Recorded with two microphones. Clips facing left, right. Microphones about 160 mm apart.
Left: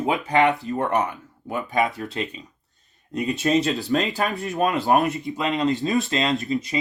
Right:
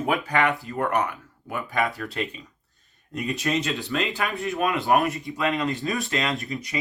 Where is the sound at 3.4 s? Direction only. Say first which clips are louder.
Left 6 dB; 35° left (ahead or behind).